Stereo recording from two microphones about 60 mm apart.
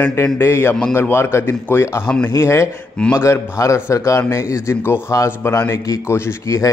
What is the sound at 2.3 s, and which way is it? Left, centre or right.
A man's voice, left.